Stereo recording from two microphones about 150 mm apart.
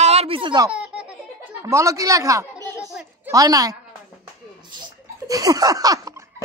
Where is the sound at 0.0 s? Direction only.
45° right (ahead or behind).